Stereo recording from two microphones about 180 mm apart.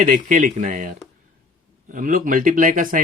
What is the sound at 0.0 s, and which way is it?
Speech, 45° right (ahead or behind).